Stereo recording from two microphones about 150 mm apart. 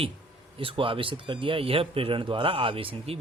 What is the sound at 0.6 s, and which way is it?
Speech, 35° right (ahead or behind).